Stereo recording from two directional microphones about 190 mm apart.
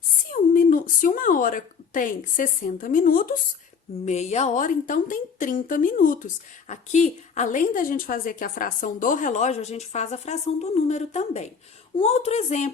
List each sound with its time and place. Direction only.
0.3 s a woman's voice: 45° left (ahead or behind)
4.0 s a woman's voice: 35° left (ahead or behind)